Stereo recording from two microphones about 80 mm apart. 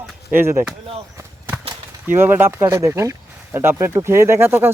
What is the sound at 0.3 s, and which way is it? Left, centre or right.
Speech, right.